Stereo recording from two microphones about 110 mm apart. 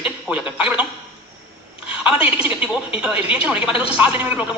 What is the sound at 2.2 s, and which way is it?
A woman's voice, 10° right (ahead or behind).